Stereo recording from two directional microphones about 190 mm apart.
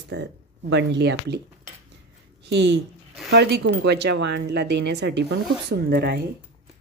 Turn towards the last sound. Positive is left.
turn(degrees=-60)  # may be behind; listen again after turning